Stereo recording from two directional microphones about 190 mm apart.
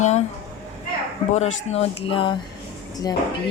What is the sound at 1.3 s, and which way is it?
A woman's voice, 35° left (ahead or behind).